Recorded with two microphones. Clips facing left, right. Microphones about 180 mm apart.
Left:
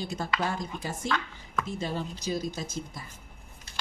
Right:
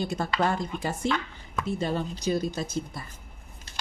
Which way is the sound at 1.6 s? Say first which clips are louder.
Right 5 dB; 60° right (ahead or behind).